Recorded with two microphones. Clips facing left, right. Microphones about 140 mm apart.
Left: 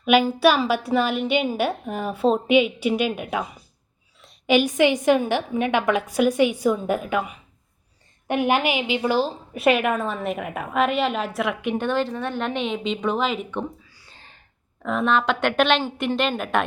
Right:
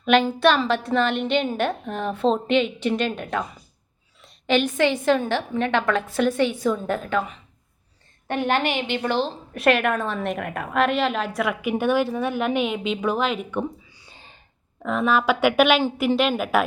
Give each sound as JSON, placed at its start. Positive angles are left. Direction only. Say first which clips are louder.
{"t": 0.0, "sound": "a woman's voice", "louder": "left 1 dB", "side_deg": 5}
{"t": 4.2, "sound": "a sound", "louder": "left 2 dB", "side_deg": 0}
{"t": 4.5, "sound": "a woman's voice", "louder": "left 2 dB", "side_deg": 15}
{"t": 13.9, "sound": "whispering", "louder": "right 2 dB", "side_deg": -20}
{"t": 14.8, "sound": "a woman's voice", "louder": "right 1 dB", "side_deg": 0}